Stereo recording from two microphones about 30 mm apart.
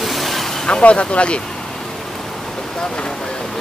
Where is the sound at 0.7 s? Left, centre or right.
Left.